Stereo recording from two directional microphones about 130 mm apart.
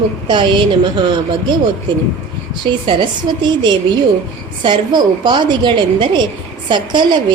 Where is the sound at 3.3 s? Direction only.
35° right (ahead or behind).